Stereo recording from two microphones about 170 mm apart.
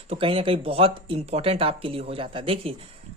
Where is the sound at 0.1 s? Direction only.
35° right (ahead or behind).